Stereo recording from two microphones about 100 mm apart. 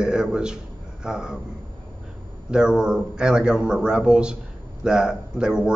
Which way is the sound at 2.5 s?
10° right (ahead or behind).